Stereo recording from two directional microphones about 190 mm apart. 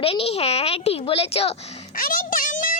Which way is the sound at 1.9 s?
45° left (ahead or behind).